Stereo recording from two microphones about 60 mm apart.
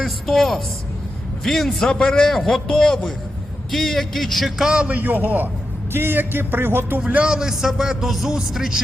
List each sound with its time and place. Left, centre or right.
0.0 s a man's voice: centre
4.5 s a man's voice: centre
4.9 s music: right
7.0 s speech: right
7.3 s a man's voice: centre